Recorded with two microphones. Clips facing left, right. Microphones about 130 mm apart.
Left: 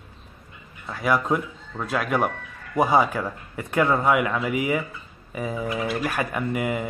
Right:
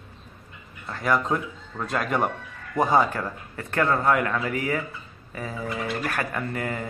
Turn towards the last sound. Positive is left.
turn(degrees=10)  # may be behind; listen again after turning